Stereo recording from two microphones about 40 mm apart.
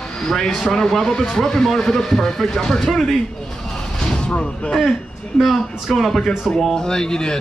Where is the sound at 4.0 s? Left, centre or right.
Left.